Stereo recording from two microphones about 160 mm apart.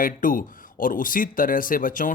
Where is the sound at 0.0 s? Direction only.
60° left (ahead or behind).